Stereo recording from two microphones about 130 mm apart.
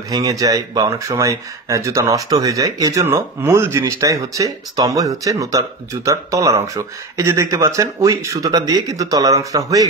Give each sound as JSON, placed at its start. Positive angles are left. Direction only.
{"t": 0.1, "sound": "speech", "side_deg": -25}